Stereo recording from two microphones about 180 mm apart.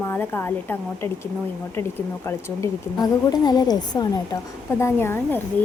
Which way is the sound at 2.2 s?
20° left (ahead or behind).